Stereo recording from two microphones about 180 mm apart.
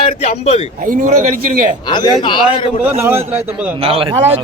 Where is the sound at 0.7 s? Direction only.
45° right (ahead or behind).